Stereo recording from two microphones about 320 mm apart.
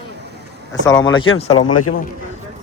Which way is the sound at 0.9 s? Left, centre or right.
Centre.